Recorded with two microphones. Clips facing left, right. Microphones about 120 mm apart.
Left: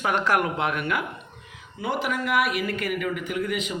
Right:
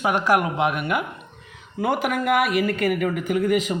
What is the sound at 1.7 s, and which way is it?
Speech, 55° right (ahead or behind).